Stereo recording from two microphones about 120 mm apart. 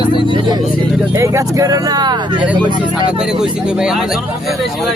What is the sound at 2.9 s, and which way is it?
Speech, 5° right (ahead or behind).